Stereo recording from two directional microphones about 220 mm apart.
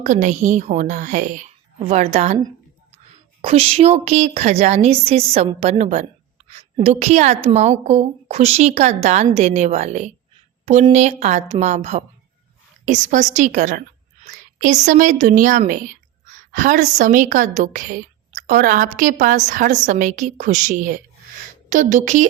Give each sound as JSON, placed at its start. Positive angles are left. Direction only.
{"t": 0.0, "sound": "a woman's voice", "side_deg": -35}
{"t": 3.4, "sound": "a woman's voice", "side_deg": -25}